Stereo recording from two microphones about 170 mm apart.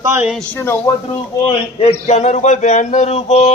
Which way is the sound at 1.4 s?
35° left (ahead or behind).